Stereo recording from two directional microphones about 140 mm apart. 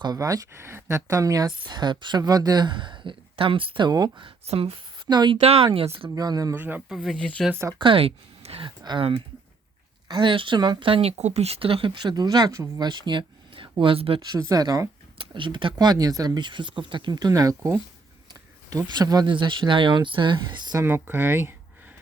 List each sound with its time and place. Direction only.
0.0 s speech: 25° right (ahead or behind)
4.4 s speech: 45° right (ahead or behind)
5.0 s speech: 30° right (ahead or behind)
5.4 s speech: 45° right (ahead or behind)
6.1 s speech: 30° right (ahead or behind)
6.5 s speech: 15° right (ahead or behind)
6.8 s speech: centre (ahead or behind)
7.8 s speech: 40° right (ahead or behind)
14.3 s speech: 25° right (ahead or behind)
20.8 s speech: 15° right (ahead or behind)